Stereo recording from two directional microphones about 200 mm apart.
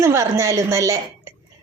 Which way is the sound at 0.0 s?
15° right (ahead or behind).